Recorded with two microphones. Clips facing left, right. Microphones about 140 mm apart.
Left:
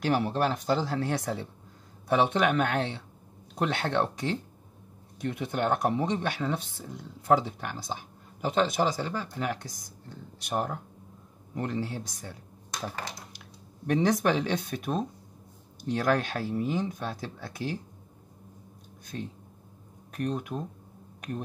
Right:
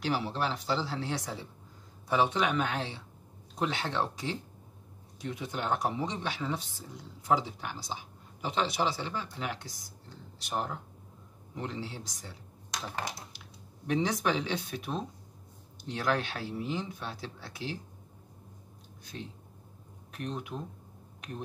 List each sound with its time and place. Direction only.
0.0 s speech: 50° left (ahead or behind)
14.2 s speech: 50° left (ahead or behind)
19.1 s speech: 50° left (ahead or behind)